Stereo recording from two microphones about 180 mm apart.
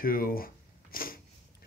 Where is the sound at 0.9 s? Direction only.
55° left (ahead or behind).